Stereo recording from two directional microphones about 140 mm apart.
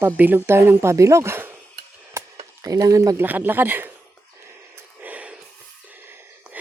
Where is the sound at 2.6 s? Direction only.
25° right (ahead or behind).